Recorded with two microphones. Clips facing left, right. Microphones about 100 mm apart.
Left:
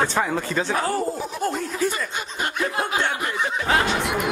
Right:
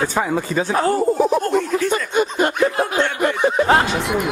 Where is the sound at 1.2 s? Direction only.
65° right (ahead or behind).